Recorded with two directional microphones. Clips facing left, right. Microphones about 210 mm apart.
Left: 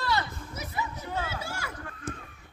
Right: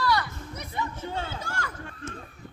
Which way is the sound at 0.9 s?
30° right (ahead or behind).